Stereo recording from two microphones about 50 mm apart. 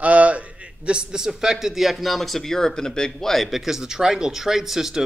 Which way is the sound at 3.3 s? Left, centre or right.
Centre.